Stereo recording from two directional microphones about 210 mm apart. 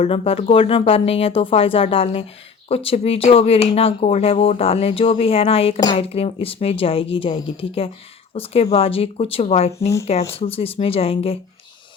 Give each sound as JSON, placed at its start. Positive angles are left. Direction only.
{"t": 0.0, "sound": "speech", "side_deg": 30}